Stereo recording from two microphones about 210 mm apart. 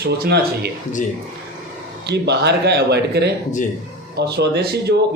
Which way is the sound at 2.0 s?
55° right (ahead or behind).